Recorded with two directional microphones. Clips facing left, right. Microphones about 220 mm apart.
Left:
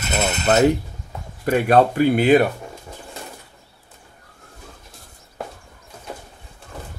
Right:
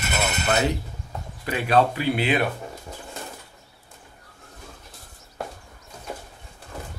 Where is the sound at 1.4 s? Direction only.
50° left (ahead or behind).